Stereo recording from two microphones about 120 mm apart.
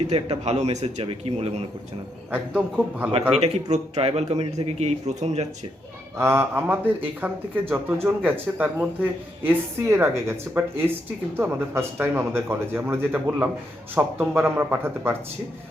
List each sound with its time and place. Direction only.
0.1 s a man's voice: 60° right (ahead or behind)
1.0 s a man's voice: 55° right (ahead or behind)
2.3 s a man's voice: 10° right (ahead or behind)
3.3 s a man's voice: 65° right (ahead or behind)
6.1 s a man's voice: 20° right (ahead or behind)